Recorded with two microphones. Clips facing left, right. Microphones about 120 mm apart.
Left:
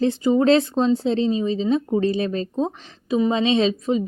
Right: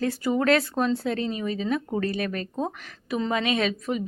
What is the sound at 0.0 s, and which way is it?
A woman's voice, 20° left (ahead or behind).